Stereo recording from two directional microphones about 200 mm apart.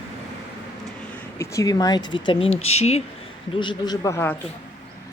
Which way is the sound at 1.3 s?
15° left (ahead or behind).